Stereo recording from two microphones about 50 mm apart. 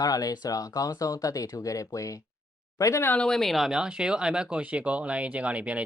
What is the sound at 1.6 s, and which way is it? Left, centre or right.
Speech, left.